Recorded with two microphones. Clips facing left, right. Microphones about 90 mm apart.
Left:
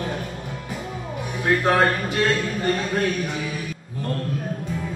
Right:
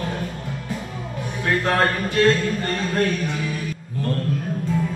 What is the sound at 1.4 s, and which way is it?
A man's voice, 10° left (ahead or behind).